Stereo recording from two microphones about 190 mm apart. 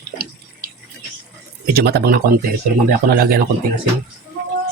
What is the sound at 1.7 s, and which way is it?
Speech, 55° right (ahead or behind).